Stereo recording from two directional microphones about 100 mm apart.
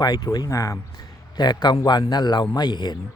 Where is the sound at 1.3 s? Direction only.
45° left (ahead or behind).